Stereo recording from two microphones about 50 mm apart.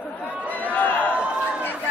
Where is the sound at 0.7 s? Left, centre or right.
Left.